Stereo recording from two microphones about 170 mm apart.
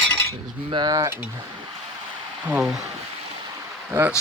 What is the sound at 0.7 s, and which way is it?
Speech, 25° right (ahead or behind).